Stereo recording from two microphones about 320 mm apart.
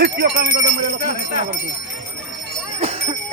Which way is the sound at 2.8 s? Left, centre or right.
Centre.